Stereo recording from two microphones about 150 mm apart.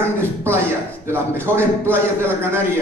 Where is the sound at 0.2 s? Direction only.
15° right (ahead or behind).